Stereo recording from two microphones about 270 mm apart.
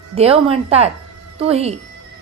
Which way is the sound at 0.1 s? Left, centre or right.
Right.